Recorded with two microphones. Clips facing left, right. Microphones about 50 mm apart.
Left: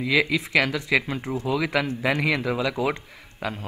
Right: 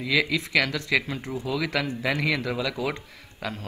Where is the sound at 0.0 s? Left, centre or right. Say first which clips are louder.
Left 2 dB; centre.